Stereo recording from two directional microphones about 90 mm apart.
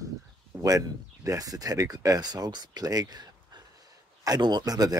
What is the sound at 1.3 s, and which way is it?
Speech, 40° right (ahead or behind).